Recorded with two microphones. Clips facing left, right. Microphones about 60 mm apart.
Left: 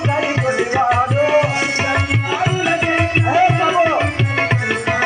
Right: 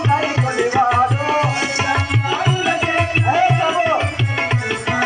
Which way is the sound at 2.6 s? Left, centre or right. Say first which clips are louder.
Left 1 dB; centre.